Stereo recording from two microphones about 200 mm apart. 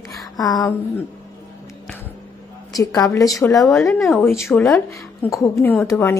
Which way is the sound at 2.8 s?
15° left (ahead or behind).